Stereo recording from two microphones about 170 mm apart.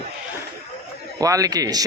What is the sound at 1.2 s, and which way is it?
Speech, 20° right (ahead or behind).